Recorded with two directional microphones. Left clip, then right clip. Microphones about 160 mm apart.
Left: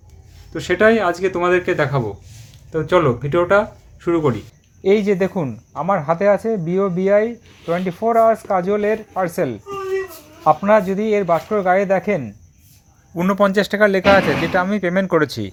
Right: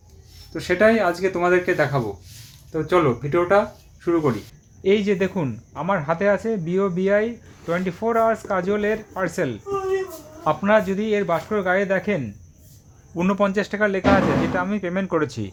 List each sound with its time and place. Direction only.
0.5 s speech: 15° left (ahead or behind)
10.7 s speech: 15° left (ahead or behind)
13.4 s speech: 35° left (ahead or behind)